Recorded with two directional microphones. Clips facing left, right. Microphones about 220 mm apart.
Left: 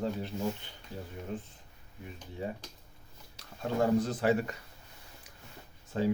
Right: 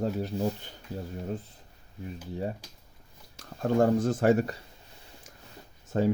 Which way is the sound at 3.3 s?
50° right (ahead or behind).